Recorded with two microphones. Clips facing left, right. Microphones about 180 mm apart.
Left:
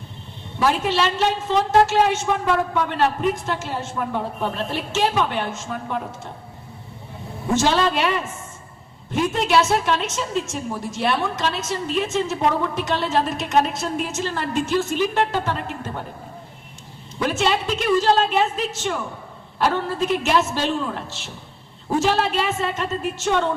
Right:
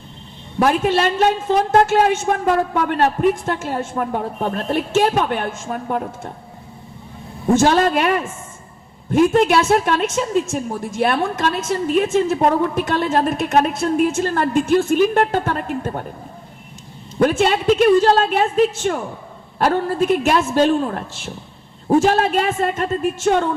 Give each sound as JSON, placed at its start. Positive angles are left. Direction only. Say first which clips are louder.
{"t": 0.6, "sound": "a woman's voice", "louder": "right 4 dB", "side_deg": -50}
{"t": 7.5, "sound": "a woman's voice", "louder": "right 5 dB", "side_deg": -50}
{"t": 17.2, "sound": "a woman's voice", "louder": "right 5 dB", "side_deg": -50}